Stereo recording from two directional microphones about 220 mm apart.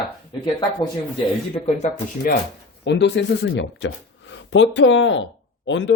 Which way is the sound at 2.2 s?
40° left (ahead or behind).